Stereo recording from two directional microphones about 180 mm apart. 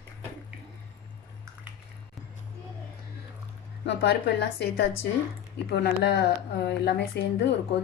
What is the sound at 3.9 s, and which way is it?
A woman's voice, 70° left (ahead or behind).